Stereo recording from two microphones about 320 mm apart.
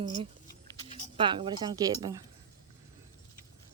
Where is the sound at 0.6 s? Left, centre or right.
Centre.